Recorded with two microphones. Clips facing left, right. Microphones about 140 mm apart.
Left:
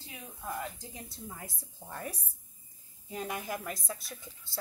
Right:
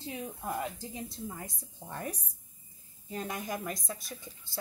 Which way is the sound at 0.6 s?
Centre (ahead or behind).